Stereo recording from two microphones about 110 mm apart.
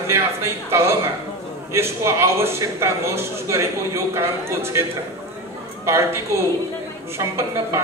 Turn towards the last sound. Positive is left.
turn(degrees=-25)  # may be behind; listen again after turning